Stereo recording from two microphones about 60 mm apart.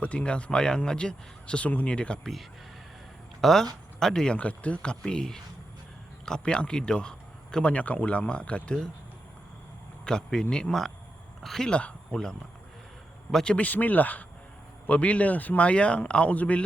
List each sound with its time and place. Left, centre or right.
0.0 s speech: centre
2.2 s speech: centre
4.4 s speech: left
7.7 s speech: left
10.0 s speech: centre
11.7 s speech: centre
13.7 s speech: left